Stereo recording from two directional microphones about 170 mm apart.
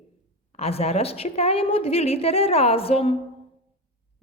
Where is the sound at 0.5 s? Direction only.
35° left (ahead or behind).